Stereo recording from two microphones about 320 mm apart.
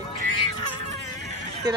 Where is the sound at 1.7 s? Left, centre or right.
Centre.